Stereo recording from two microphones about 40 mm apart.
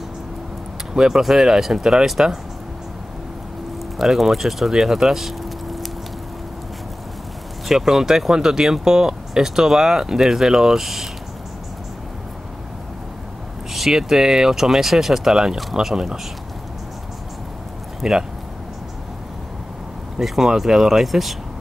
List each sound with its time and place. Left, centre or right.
0.9 s speech: centre
4.0 s speech: centre
7.6 s speech: centre
13.7 s speech: centre
18.0 s speech: centre
20.2 s speech: centre